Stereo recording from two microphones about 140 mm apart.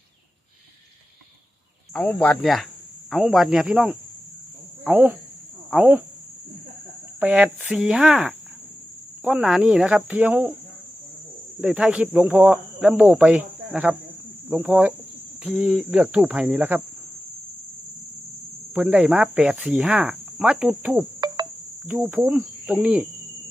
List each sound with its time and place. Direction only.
1.9 s speech: 10° left (ahead or behind); by 6.0 s 10° right (ahead or behind)
7.2 s speech: 10° right (ahead or behind)
11.6 s speech: 10° right (ahead or behind)
18.7 s speech: 10° right (ahead or behind)
21.2 s insect: 30° right (ahead or behind)
21.8 s speech: 15° right (ahead or behind)